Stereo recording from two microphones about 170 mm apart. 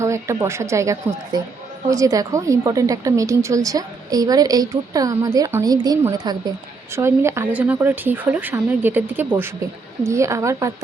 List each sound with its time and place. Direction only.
0.0 s a woman's voice: 15° right (ahead or behind)